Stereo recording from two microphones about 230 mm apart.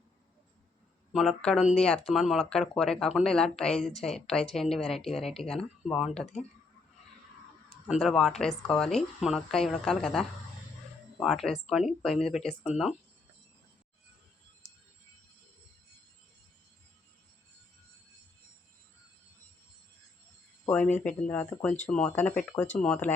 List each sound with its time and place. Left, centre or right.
1.1 s speech: centre
7.7 s speech: centre
11.7 s speech: centre
20.7 s speech: centre